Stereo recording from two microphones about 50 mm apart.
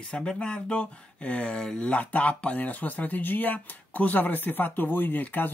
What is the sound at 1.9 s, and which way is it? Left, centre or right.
Speech, left.